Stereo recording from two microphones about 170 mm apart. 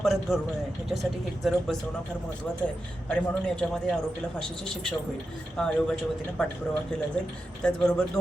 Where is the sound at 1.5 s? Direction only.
Centre (ahead or behind).